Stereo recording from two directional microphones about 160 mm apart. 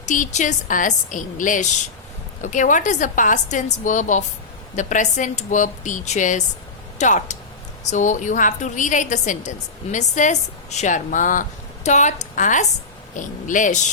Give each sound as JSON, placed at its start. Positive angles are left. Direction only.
{"t": 0.0, "sound": "speech", "side_deg": 50}